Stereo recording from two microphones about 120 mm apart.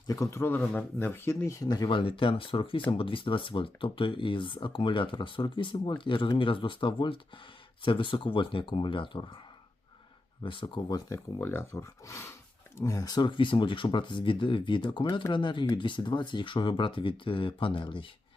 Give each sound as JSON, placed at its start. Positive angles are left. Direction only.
{"t": 0.1, "sound": "speech", "side_deg": 25}
{"t": 10.4, "sound": "speech", "side_deg": 40}
{"t": 11.3, "sound": "speech", "side_deg": 20}